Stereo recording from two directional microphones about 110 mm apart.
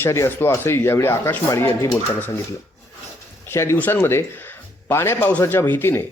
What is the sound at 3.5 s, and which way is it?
A man's voice, 25° left (ahead or behind).